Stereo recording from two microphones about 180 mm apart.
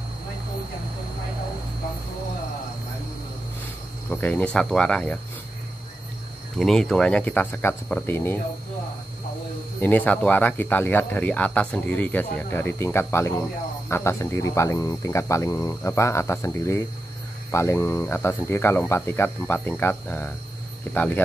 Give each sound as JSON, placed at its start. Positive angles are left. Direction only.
{"t": 4.1, "sound": "speech", "side_deg": 10}
{"t": 6.6, "sound": "speech", "side_deg": 0}
{"t": 9.8, "sound": "speech", "side_deg": 10}